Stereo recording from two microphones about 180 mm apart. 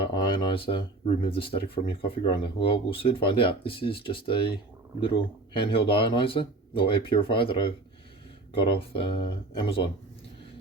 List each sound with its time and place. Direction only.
0.1 s speech: 25° left (ahead or behind)